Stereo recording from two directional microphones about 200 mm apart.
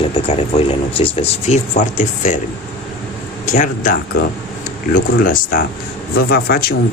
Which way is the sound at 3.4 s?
40° left (ahead or behind).